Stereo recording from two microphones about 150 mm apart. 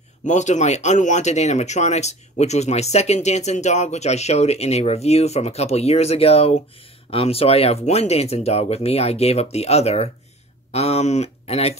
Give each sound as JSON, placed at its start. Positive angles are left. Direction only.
{"t": 0.2, "sound": "speech", "side_deg": 50}